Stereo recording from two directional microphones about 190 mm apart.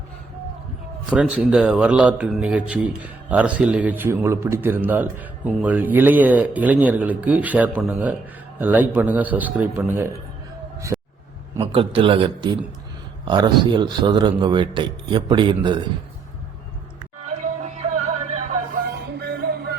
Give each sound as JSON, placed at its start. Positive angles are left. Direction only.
{"t": 1.1, "sound": "a man's voice", "side_deg": -5}
{"t": 10.9, "sound": "a sound", "side_deg": -5}
{"t": 11.6, "sound": "speech", "side_deg": -30}
{"t": 17.2, "sound": "music", "side_deg": -35}